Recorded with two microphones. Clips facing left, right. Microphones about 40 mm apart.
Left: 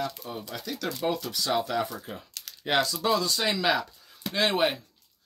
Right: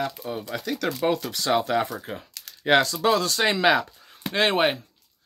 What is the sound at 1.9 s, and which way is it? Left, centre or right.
Speech, right.